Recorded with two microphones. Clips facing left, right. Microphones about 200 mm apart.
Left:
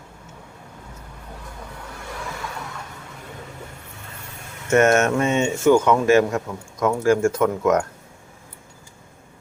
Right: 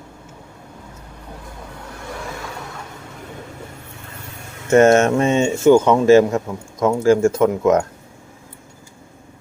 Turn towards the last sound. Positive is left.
turn(degrees=-25)  # may be behind; listen again after turning